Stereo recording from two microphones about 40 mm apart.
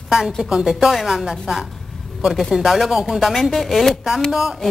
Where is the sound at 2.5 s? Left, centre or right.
Centre.